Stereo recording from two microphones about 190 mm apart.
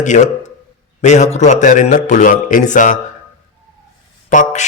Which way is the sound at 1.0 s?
40° left (ahead or behind).